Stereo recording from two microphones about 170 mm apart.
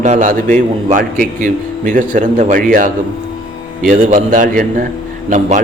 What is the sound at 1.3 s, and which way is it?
A man's voice, 50° right (ahead or behind).